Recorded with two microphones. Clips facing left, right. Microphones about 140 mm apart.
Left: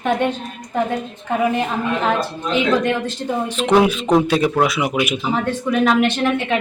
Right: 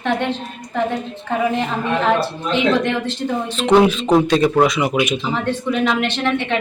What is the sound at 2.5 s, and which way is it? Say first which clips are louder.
A woman's voice: even; 10° left (ahead or behind).